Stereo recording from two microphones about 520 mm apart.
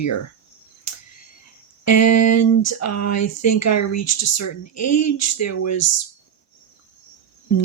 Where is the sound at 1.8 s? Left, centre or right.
Left.